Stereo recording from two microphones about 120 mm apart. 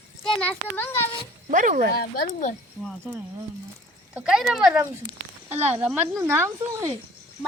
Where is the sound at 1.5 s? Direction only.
90° right.